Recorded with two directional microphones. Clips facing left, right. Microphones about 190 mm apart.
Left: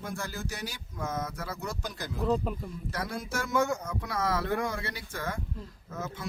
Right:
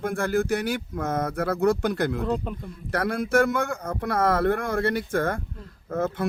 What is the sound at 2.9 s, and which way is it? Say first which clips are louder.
Speech: right 13 dB; 60° right (ahead or behind).